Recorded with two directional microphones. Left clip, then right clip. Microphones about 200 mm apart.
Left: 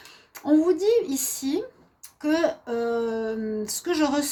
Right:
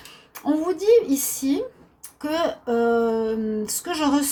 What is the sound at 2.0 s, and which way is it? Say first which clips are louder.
A woman's voice: even; 40° left (ahead or behind).